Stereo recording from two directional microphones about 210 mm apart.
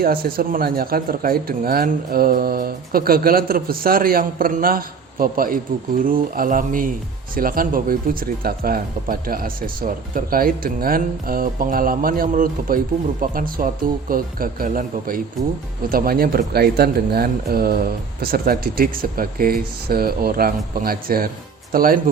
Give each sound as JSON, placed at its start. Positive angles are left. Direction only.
{"t": 0.0, "sound": "speech", "side_deg": -45}